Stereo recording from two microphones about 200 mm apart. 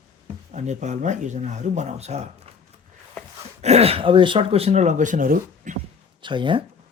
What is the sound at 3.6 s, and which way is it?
Speech, 30° right (ahead or behind).